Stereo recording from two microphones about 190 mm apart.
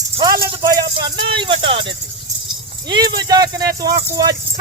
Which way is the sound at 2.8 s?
25° right (ahead or behind).